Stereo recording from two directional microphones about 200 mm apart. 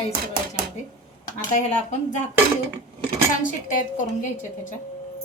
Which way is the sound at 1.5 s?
35° left (ahead or behind).